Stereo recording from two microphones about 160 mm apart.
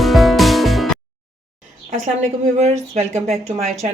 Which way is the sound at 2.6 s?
40° right (ahead or behind).